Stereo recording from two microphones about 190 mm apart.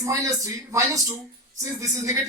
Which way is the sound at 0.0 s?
15° right (ahead or behind).